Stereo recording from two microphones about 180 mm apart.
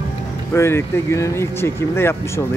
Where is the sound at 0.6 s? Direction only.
15° left (ahead or behind).